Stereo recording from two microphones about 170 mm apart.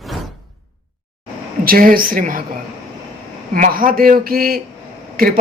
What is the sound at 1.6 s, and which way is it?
Speech, 60° right (ahead or behind).